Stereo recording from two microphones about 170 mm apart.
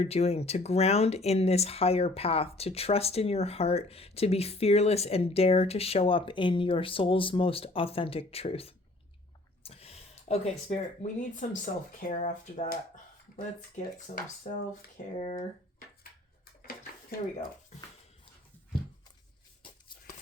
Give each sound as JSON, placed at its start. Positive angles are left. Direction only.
{"t": 0.0, "sound": "speech", "side_deg": 40}
{"t": 14.5, "sound": "speech", "side_deg": 45}